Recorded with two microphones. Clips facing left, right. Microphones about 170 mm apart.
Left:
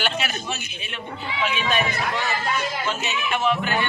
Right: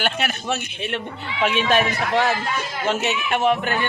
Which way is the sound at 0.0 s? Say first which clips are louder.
Right 2 dB; 55° right (ahead or behind).